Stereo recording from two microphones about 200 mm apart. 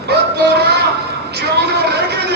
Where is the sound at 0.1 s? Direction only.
55° right (ahead or behind).